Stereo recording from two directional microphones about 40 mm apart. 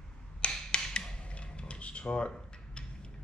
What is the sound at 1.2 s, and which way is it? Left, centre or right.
Dishes, left.